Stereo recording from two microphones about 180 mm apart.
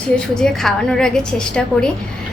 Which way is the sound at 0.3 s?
5° left (ahead or behind).